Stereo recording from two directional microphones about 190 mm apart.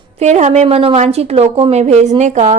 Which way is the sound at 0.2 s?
35° right (ahead or behind).